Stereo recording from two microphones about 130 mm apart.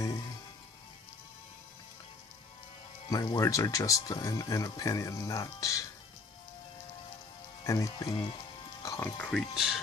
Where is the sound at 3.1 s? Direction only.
30° left (ahead or behind).